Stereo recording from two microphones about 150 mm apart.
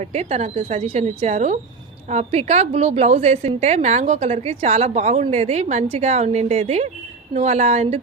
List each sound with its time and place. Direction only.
0.0 s a woman's voice: 45° right (ahead or behind)